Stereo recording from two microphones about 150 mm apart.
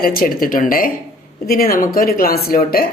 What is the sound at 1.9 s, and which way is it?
Speech, 85° left.